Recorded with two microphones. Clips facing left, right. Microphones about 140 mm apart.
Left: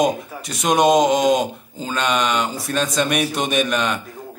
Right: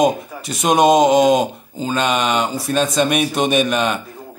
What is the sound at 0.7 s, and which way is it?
Speech, 5° right (ahead or behind).